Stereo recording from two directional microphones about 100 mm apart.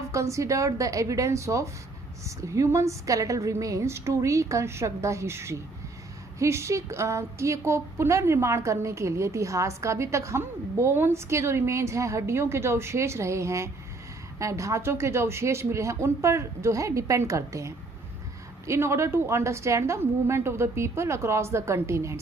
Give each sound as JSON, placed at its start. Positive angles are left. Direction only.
{"t": 0.1, "sound": "a woman's voice", "side_deg": -30}